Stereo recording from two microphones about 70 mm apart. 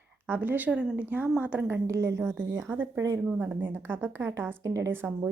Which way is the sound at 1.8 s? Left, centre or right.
Right.